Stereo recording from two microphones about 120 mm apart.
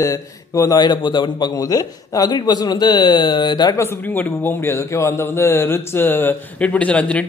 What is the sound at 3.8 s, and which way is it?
Speech, 15° left (ahead or behind).